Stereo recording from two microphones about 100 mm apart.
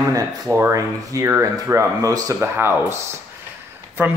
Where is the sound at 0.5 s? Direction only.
30° right (ahead or behind).